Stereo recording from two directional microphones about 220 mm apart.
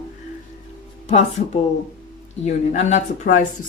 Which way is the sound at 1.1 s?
30° left (ahead or behind).